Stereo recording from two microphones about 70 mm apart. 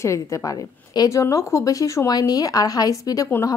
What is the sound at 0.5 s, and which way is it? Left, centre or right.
Speech, left.